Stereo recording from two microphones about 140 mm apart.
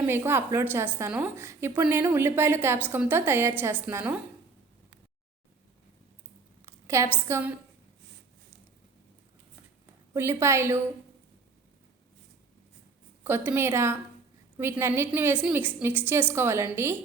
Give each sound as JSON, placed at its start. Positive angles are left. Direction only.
{"t": 0.0, "sound": "a woman's voice", "side_deg": -15}
{"t": 6.7, "sound": "a sound", "side_deg": -20}
{"t": 7.3, "sound": "a woman's voice", "side_deg": -20}
{"t": 10.2, "sound": "a woman's voice", "side_deg": -20}
{"t": 13.2, "sound": "a woman's voice", "side_deg": -15}